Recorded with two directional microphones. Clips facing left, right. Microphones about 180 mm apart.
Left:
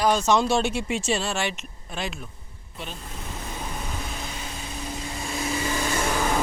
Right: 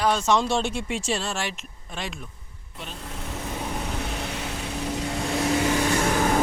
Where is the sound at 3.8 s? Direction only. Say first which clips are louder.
Right 4 dB; 70° right (ahead or behind).